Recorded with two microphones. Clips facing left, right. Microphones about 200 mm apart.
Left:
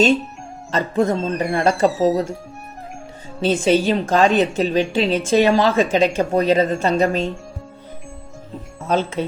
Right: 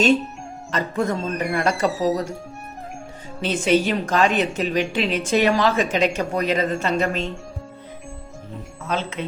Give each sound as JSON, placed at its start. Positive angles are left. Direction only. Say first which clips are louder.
{"t": 0.7, "sound": "a woman's voice", "louder": "left 4 dB", "side_deg": 30}
{"t": 3.4, "sound": "a woman's voice", "louder": "left 3 dB", "side_deg": 30}
{"t": 9.2, "sound": "a woman's voice", "louder": "left 6 dB", "side_deg": 35}